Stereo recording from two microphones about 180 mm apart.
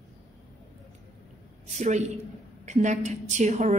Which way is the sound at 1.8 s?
40° right (ahead or behind).